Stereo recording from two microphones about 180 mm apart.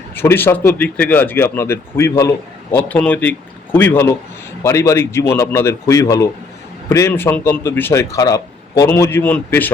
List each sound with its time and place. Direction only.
0.2 s speech: 10° left (ahead or behind)